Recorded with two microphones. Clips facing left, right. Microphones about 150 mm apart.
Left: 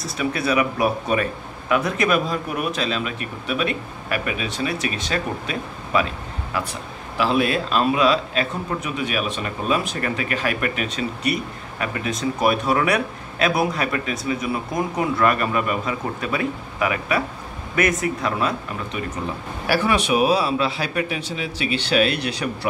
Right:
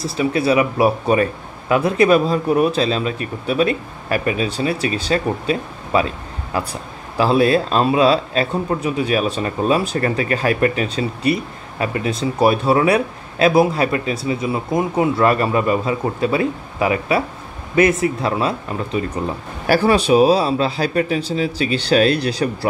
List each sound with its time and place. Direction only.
0.0 s speech: 30° right (ahead or behind)
7.2 s speech: 35° right (ahead or behind)
19.7 s speech: 35° right (ahead or behind)